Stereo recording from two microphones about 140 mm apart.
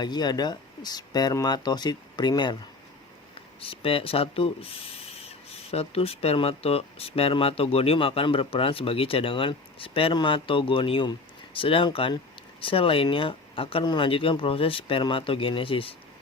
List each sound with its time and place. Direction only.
0.0 s speech: 30° left (ahead or behind)
3.6 s speech: 40° left (ahead or behind)